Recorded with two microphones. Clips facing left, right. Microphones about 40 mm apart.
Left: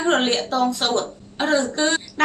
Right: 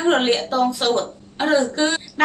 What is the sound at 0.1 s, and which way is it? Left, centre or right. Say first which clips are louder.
A woman's voice: right 1 dB; centre.